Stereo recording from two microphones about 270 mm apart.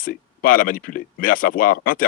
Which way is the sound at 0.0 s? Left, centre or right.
Left.